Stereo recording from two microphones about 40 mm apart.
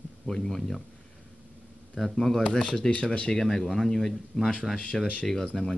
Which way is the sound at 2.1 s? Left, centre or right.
Centre.